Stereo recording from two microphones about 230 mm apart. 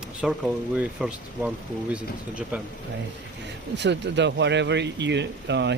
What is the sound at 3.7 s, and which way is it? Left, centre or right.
Speech, right.